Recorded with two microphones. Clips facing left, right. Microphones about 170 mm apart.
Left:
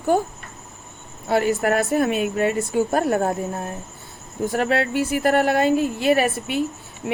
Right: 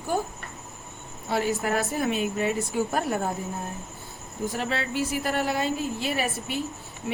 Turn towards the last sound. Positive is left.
turn(degrees=65)  # may be behind; listen again after turning